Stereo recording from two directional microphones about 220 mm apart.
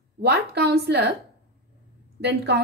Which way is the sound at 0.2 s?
50° right (ahead or behind).